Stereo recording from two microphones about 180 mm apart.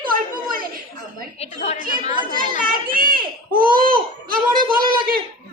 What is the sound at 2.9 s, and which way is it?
Baby cry, 50° right (ahead or behind).